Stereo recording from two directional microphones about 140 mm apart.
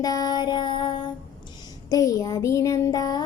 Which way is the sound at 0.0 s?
25° left (ahead or behind).